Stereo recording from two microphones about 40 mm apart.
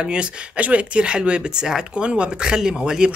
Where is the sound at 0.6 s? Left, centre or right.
Right.